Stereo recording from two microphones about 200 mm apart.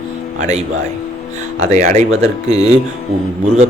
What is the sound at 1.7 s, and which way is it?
Speech, 35° right (ahead or behind).